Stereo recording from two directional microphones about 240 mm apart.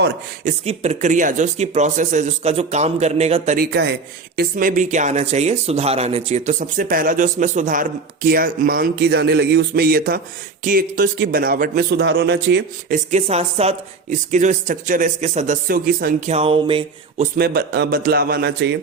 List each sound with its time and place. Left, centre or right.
0.4 s speech: right
13.1 s speech: right
16.3 s speech: right
17.3 s speech: right